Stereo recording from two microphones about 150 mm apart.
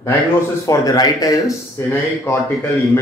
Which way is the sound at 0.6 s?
20° left (ahead or behind).